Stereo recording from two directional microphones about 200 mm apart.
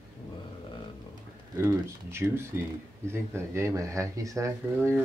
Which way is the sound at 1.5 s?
15° right (ahead or behind).